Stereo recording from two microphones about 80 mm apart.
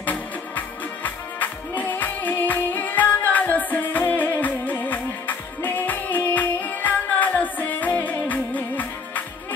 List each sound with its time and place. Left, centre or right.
0.0 s music: left